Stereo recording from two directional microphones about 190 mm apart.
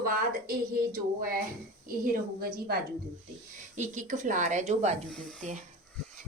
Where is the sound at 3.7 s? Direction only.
40° right (ahead or behind).